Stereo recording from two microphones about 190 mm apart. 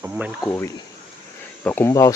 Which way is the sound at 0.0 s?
10° right (ahead or behind).